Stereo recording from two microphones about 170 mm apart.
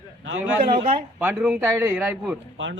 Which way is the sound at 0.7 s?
30° right (ahead or behind).